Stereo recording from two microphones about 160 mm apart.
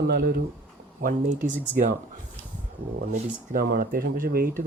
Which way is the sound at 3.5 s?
65° right (ahead or behind).